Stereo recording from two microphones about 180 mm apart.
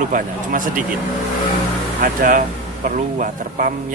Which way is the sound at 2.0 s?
50° right (ahead or behind).